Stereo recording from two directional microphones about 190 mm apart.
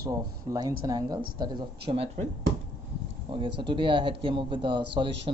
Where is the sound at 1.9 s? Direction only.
30° right (ahead or behind).